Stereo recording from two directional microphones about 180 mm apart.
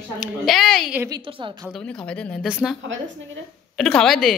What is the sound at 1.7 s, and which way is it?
Speech, 5° left (ahead or behind).